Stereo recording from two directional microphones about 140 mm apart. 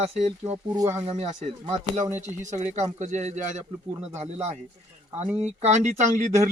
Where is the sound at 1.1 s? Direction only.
50° right (ahead or behind).